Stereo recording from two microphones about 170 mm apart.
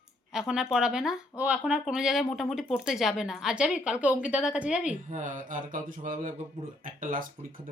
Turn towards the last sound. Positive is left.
turn(degrees=-55)  # may be behind; listen again after turning